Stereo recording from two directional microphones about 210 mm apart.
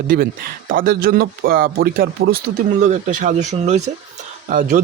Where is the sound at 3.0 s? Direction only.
35° right (ahead or behind).